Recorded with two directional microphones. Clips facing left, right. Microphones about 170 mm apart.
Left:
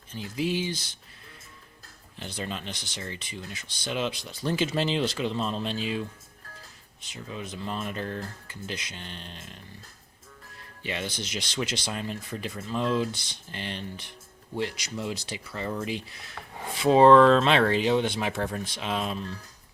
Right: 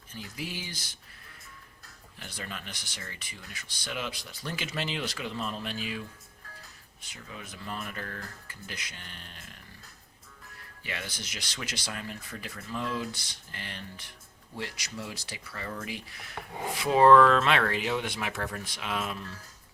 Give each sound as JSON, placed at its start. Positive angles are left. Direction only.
{"t": 0.1, "sound": "speech", "side_deg": 25}
{"t": 2.1, "sound": "speech", "side_deg": 25}
{"t": 7.0, "sound": "speech", "side_deg": 20}
{"t": 10.8, "sound": "speech", "side_deg": 25}